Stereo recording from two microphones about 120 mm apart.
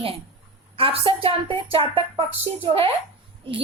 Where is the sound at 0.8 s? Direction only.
50° right (ahead or behind).